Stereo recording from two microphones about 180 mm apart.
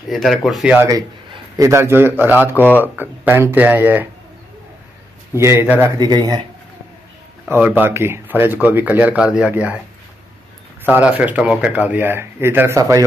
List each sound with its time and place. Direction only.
0.1 s speech: centre (ahead or behind)
0.8 s speech: 20° right (ahead or behind)
5.3 s speech: 15° right (ahead or behind)
7.4 s speech: 10° right (ahead or behind)
10.8 s speech: 10° right (ahead or behind)